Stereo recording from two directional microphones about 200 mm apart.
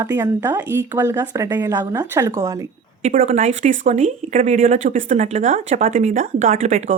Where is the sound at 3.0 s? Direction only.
35° right (ahead or behind).